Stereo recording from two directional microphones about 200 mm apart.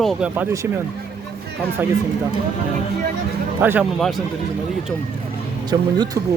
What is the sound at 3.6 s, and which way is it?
Speech, 10° right (ahead or behind).